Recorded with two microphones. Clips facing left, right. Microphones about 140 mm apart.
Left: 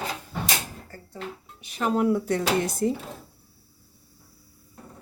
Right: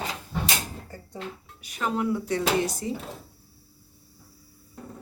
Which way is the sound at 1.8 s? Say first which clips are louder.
Left 4 dB; 45° left (ahead or behind).